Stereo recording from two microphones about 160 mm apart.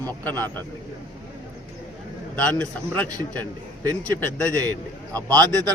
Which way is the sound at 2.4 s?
5° left (ahead or behind).